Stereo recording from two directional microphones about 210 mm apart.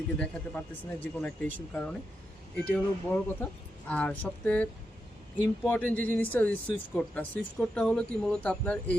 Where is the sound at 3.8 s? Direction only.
5° left (ahead or behind).